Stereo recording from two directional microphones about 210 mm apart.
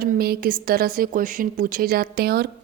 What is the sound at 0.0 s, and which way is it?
A woman's voice, 45° right (ahead or behind).